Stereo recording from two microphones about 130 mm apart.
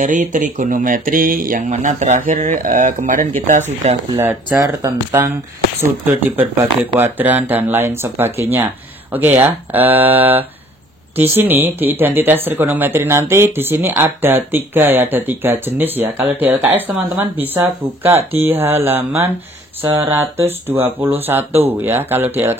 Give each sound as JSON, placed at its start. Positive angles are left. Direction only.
{"t": 0.0, "sound": "speech", "side_deg": -75}
{"t": 4.2, "sound": "speech", "side_deg": -15}
{"t": 6.3, "sound": "speech", "side_deg": -15}